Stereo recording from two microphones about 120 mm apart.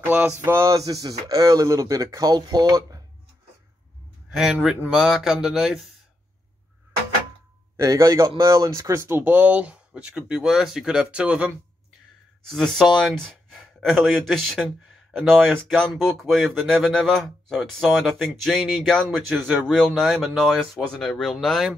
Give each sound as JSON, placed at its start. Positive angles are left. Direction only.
{"t": 0.0, "sound": "speech", "side_deg": -15}
{"t": 4.4, "sound": "speech", "side_deg": -5}
{"t": 7.7, "sound": "speech", "side_deg": -25}
{"t": 12.4, "sound": "speech", "side_deg": 0}